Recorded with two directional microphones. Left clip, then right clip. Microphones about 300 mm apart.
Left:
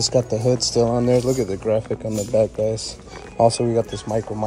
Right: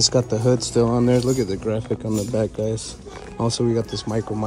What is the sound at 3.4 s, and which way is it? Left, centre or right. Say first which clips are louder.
Speech: left 5 dB; centre.